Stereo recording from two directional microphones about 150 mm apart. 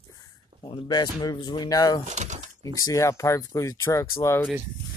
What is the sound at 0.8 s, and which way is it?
Speech, 30° left (ahead or behind).